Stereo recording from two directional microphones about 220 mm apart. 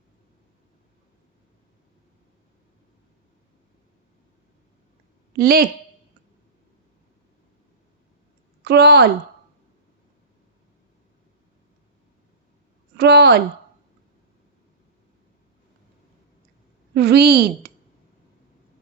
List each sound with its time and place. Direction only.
5.4 s speech: 45° right (ahead or behind)
8.6 s a woman's voice: 45° right (ahead or behind)
13.0 s speech: 50° right (ahead or behind)
16.9 s speech: 50° right (ahead or behind)